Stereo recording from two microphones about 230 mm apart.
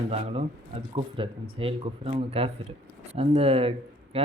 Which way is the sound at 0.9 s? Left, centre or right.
Right.